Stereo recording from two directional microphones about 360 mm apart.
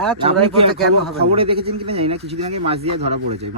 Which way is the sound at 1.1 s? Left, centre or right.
Centre.